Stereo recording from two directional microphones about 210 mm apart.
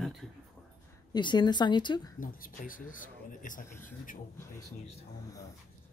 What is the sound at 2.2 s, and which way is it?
Speech, 40° left (ahead or behind).